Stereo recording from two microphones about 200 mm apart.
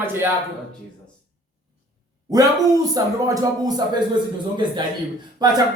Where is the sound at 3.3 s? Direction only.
20° right (ahead or behind).